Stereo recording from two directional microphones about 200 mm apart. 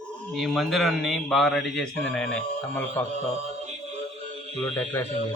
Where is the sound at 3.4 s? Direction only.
35° right (ahead or behind).